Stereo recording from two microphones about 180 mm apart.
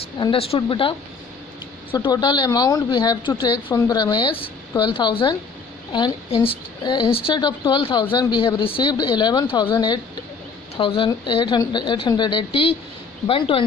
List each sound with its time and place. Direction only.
0.2 s a woman's voice: 30° left (ahead or behind)